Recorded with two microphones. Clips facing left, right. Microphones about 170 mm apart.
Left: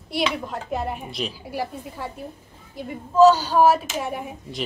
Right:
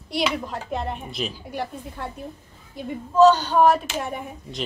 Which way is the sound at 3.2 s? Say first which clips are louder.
Left 1 dB; 5° left (ahead or behind).